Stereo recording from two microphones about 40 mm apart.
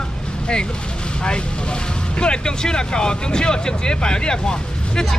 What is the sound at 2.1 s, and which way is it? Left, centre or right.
Speech, left.